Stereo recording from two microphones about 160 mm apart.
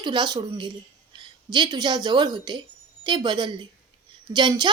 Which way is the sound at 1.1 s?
25° right (ahead or behind).